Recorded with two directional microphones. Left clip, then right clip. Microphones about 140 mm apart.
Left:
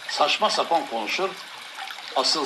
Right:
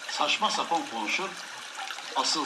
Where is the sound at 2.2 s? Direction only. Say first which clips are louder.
Left 5 dB; 45° left (ahead or behind).